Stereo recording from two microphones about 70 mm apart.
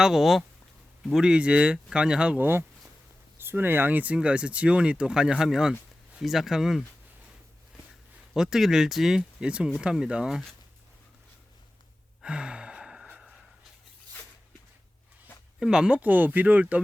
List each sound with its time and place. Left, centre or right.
0.0 s speech: centre
2.4 s speech: right; by 6.8 s centre
8.3 s speech: centre
12.2 s sigh: centre
15.6 s speech: centre